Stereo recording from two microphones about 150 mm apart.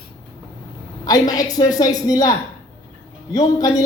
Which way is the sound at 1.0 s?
25° left (ahead or behind).